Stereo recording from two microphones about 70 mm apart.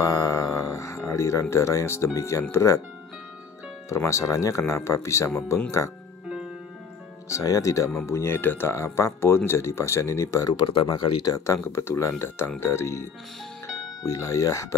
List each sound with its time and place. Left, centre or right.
0.0 s music: left
2.1 s speech: left
3.9 s speech: left
7.2 s speech: left
8.0 s speech: left
8.7 s speech: left
11.1 s speech: left
14.0 s speech: left